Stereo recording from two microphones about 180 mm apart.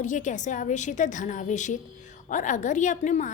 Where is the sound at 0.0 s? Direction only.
45° left (ahead or behind).